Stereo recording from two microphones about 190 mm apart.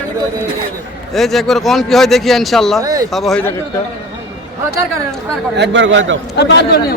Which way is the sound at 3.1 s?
Centre (ahead or behind).